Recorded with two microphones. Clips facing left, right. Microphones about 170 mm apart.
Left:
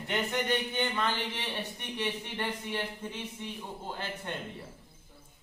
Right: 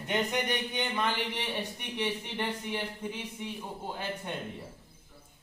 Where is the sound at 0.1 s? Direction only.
15° right (ahead or behind).